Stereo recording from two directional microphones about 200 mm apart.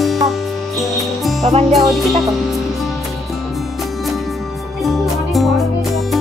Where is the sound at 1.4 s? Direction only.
30° right (ahead or behind).